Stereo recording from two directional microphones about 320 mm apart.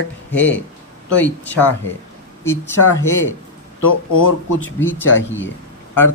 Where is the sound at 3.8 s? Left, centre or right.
Left.